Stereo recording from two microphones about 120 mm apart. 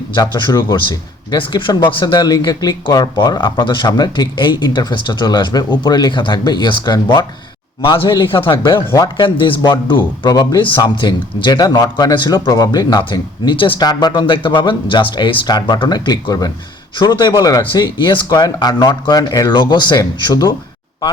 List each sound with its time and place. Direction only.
0.1 s a man's voice: 35° left (ahead or behind)
10.2 s speech: 35° left (ahead or behind)